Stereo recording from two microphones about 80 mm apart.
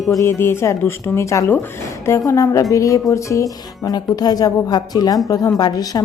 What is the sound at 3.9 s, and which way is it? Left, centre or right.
A woman's voice, left.